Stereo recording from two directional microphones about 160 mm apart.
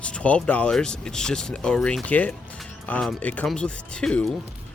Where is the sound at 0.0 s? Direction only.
5° left (ahead or behind).